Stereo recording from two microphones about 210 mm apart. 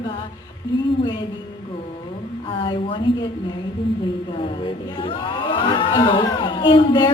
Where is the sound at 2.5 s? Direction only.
25° left (ahead or behind).